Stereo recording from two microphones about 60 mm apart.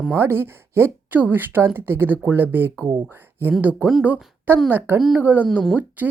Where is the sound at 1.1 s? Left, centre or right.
Right.